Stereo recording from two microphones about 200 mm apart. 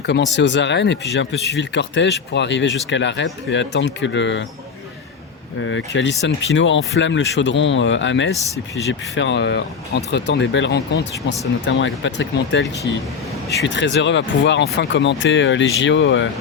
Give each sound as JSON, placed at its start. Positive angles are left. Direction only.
{"t": 0.0, "sound": "speech", "side_deg": 60}
{"t": 5.5, "sound": "speech", "side_deg": 70}
{"t": 11.6, "sound": "speech", "side_deg": 70}